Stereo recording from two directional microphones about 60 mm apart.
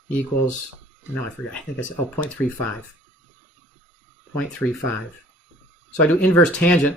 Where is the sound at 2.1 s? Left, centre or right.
Left.